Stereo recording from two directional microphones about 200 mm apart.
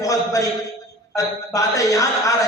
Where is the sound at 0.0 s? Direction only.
15° left (ahead or behind).